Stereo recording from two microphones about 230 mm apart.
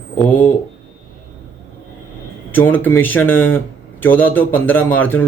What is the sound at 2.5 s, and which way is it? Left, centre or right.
Speech, centre.